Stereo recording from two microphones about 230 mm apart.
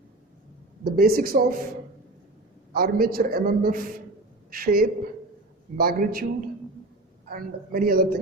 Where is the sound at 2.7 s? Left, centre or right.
Right.